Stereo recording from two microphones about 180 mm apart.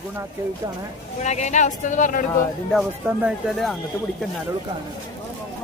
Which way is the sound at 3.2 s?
Centre (ahead or behind).